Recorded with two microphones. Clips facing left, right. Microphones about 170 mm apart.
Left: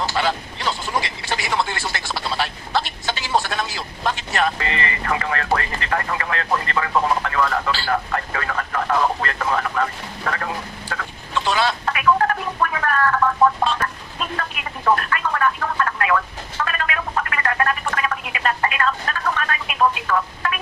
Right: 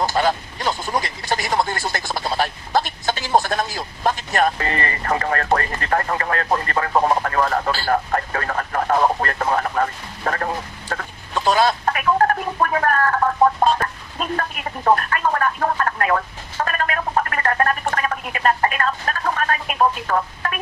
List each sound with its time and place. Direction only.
0.1 s vehicle: 45° right (ahead or behind)
1.0 s speech: 45° right (ahead or behind)
14.2 s a sound: 40° right (ahead or behind)